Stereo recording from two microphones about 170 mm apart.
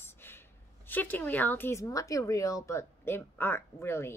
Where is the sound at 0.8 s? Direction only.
10° left (ahead or behind).